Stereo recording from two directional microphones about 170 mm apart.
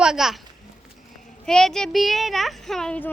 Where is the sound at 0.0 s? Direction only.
5° right (ahead or behind).